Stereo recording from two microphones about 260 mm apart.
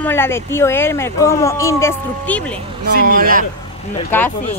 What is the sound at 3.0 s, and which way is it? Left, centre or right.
Speech, right.